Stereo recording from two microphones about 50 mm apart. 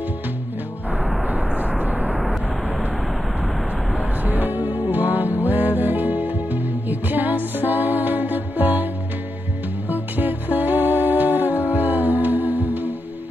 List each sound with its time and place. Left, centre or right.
2.0 s vehicle: centre
4.3 s music: right
9.8 s music: right